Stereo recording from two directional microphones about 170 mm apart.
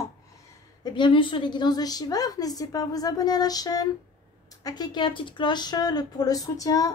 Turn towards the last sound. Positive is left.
turn(degrees=20)  # may be behind; listen again after turning